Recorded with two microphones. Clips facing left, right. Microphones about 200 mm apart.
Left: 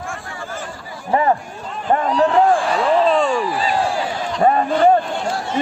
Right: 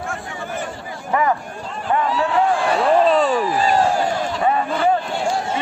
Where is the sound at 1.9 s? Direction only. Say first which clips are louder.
Left 4 dB; 40° left (ahead or behind).